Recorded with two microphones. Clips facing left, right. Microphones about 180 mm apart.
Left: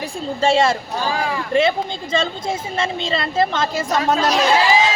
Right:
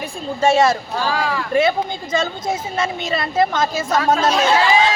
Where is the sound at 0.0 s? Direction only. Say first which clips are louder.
Right 1 dB; 30° left (ahead or behind).